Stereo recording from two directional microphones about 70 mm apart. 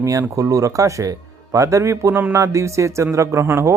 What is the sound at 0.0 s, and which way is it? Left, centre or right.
Speech, right.